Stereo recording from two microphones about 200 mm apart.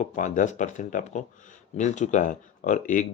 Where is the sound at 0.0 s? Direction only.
40° left (ahead or behind).